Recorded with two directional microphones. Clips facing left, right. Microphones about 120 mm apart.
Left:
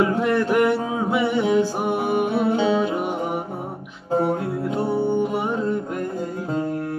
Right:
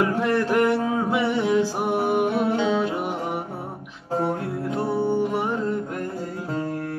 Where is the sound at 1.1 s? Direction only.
Centre (ahead or behind).